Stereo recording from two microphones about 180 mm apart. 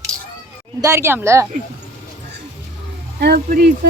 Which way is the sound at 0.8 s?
15° right (ahead or behind).